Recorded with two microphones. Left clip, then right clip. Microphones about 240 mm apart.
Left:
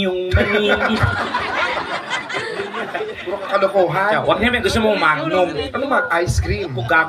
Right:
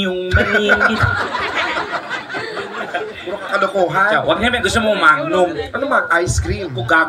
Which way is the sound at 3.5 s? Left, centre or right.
Right.